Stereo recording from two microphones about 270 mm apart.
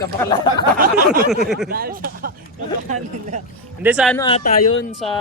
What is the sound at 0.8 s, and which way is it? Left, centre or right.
Speech, right.